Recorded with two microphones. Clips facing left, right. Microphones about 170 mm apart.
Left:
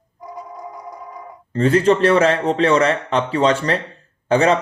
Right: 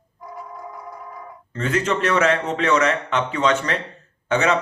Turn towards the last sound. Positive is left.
turn(degrees=35)  # may be behind; listen again after turning